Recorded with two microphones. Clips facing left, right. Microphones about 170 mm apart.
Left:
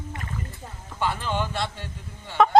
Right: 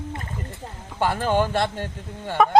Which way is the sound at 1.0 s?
50° right (ahead or behind).